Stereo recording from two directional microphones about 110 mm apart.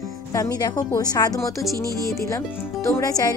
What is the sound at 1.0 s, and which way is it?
Speech, 35° left (ahead or behind).